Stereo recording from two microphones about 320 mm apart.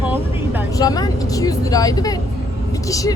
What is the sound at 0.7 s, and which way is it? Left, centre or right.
Speech, centre.